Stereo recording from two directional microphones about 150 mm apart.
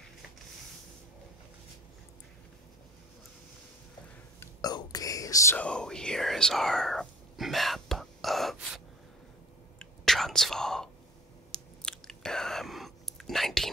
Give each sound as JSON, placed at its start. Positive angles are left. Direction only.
{"t": 4.4, "sound": "speech", "side_deg": 25}
{"t": 5.6, "sound": "speech", "side_deg": 5}
{"t": 9.8, "sound": "whispering", "side_deg": 0}